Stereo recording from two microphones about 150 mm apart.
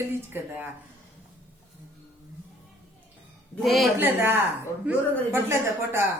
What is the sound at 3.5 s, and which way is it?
Speech, centre (ahead or behind).